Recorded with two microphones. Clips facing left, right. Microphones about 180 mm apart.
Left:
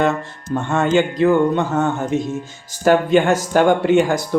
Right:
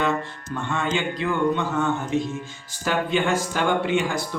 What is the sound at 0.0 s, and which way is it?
Speech, 45° left (ahead or behind).